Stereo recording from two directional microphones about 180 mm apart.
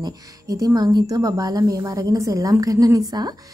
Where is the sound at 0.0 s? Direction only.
20° right (ahead or behind).